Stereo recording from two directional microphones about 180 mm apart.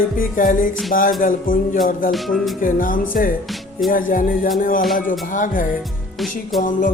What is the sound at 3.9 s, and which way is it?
Speech, 50° left (ahead or behind).